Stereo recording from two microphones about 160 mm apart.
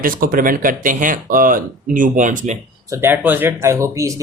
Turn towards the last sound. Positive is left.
turn(degrees=-20)  # may be behind; listen again after turning